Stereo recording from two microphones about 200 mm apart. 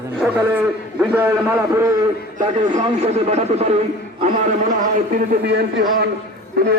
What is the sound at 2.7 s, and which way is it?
A man's voice, 35° right (ahead or behind).